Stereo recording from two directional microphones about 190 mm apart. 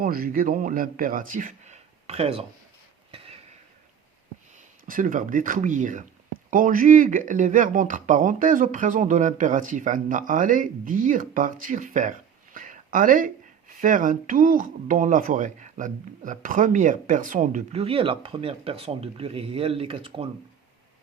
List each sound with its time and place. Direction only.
0.0 s speech: 50° right (ahead or behind); by 2.5 s 30° right (ahead or behind)
4.9 s speech: 45° right (ahead or behind); by 20.2 s 30° right (ahead or behind)